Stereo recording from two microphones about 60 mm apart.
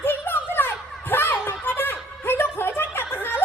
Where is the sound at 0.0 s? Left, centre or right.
Left.